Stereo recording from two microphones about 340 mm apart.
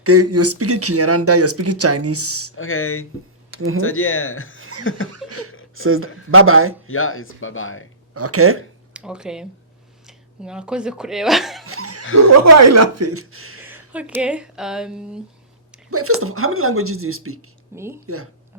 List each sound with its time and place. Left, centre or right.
0.0 s speech: right
2.6 s speech: left
5.1 s chuckle: right
5.7 s speech: right
6.8 s speech: left
8.1 s speech: right
8.9 s speech: centre
11.6 s a sound: right
12.1 s speech: right
13.9 s speech: centre
15.9 s speech: right
17.7 s speech: centre
18.0 s speech: right